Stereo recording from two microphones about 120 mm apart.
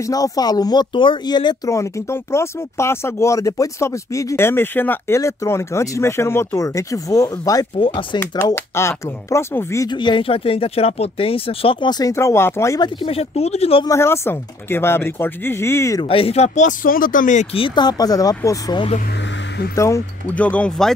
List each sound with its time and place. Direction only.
0.0 s speech: 30° left (ahead or behind)
1.7 s speech: 25° left (ahead or behind)
7.8 s speech: 45° left (ahead or behind)
8.5 s speech: 20° left (ahead or behind)
9.8 s speech: 40° left (ahead or behind); by 12.8 s 25° left (ahead or behind)
12.8 s speech: 50° left (ahead or behind)
13.8 s speech: 20° left (ahead or behind)
16.0 s speech: 50° left (ahead or behind); by 17.5 s 90° left
17.6 s speech: 40° left (ahead or behind); by 20.0 s 25° left (ahead or behind)
20.3 s speech: 10° left (ahead or behind)